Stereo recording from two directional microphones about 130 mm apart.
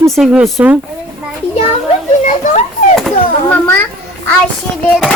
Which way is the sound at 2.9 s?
5° left (ahead or behind).